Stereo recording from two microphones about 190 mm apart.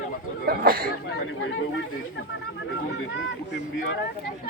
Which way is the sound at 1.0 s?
70° left (ahead or behind).